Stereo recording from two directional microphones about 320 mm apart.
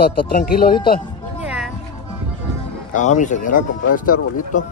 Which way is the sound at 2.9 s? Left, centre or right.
Left.